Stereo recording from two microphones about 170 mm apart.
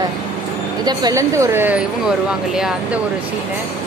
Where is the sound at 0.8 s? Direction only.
20° right (ahead or behind); by 3.0 s 5° right (ahead or behind).